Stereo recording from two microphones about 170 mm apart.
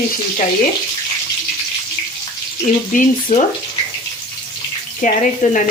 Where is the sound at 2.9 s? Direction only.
45° left (ahead or behind).